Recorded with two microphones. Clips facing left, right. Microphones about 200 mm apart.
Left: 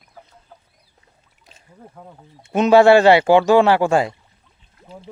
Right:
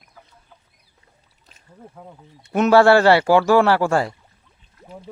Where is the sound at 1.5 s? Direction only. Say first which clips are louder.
Left 5 dB; 10° left (ahead or behind).